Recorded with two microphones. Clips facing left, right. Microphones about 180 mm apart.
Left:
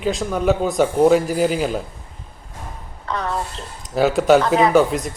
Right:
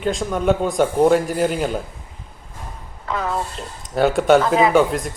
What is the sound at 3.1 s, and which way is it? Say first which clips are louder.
Speech: right 1 dB; 5° right (ahead or behind).